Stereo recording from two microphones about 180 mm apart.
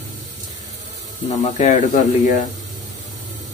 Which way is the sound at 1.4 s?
40° left (ahead or behind).